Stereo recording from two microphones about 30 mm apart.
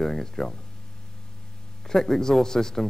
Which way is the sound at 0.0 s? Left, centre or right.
Centre.